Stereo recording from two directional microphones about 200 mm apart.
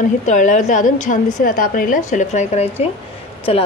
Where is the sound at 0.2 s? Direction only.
40° left (ahead or behind).